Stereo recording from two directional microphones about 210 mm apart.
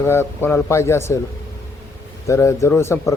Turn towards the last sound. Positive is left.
turn(degrees=10)  # may be behind; listen again after turning